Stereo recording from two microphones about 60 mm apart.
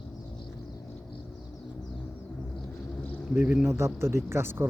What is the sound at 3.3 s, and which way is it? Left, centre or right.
Speech, right.